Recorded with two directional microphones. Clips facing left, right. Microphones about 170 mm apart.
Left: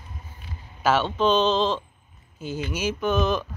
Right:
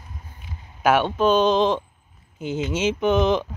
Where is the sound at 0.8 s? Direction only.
15° right (ahead or behind).